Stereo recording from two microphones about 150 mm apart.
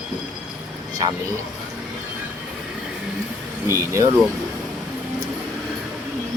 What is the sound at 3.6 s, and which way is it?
Speech, 20° right (ahead or behind).